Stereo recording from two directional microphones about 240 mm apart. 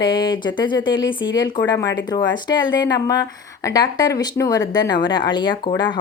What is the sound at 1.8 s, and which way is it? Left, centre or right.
Speech, left.